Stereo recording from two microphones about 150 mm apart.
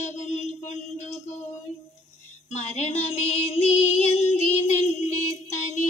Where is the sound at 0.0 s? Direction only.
50° left (ahead or behind).